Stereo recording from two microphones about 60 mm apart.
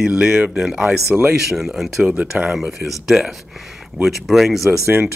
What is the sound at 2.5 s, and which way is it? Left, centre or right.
Speech, centre.